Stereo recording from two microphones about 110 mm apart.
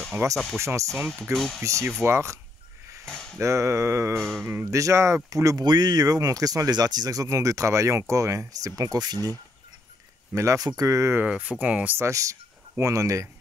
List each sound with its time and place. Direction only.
0.2 s speech: 25° right (ahead or behind)
1.3 s speech: centre (ahead or behind)
1.6 s speech: 25° right (ahead or behind)
3.1 s a sound: 5° left (ahead or behind)
3.3 s speech: 25° right (ahead or behind)
4.2 s speech: centre (ahead or behind)
4.5 s speech: 25° right (ahead or behind)
10.3 s speech: 30° right (ahead or behind)
11.2 s speech: 10° right (ahead or behind)
12.0 s speech: 30° right (ahead or behind)